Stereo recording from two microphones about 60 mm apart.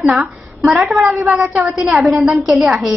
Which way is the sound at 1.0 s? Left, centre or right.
Right.